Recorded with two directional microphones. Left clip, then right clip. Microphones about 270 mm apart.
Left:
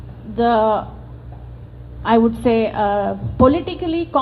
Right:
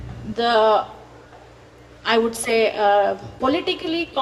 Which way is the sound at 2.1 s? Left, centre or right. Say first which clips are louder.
Left 4 dB; right.